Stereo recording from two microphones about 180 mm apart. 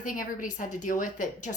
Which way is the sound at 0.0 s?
50° left (ahead or behind).